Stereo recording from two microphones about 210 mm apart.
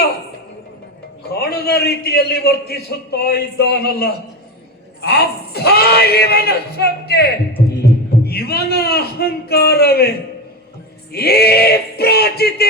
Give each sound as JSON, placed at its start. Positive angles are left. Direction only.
{"t": 1.4, "sound": "a man's voice", "side_deg": 50}